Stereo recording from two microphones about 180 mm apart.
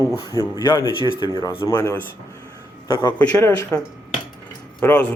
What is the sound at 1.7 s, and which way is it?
Speech, 10° left (ahead or behind).